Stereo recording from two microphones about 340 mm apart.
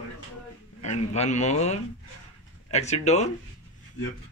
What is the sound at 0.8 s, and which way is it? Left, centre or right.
Speech, centre.